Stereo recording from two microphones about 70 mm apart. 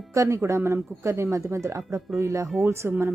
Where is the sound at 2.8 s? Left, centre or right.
Right.